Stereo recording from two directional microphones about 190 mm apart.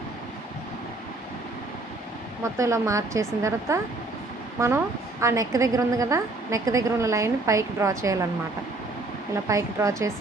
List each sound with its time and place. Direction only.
2.4 s a woman's voice: 15° right (ahead or behind)
5.2 s a woman's voice: 15° right (ahead or behind)
9.5 s a woman's voice: 15° right (ahead or behind)